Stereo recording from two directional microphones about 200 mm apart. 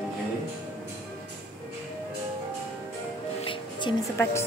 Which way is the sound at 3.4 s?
25° left (ahead or behind).